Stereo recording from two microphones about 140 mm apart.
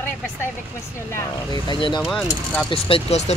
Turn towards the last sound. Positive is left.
turn(degrees=45)  # may be behind; listen again after turning